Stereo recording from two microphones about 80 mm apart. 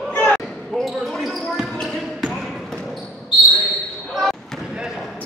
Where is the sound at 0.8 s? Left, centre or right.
Centre.